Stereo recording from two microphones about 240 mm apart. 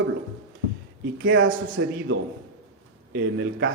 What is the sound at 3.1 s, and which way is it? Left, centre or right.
Speech, right.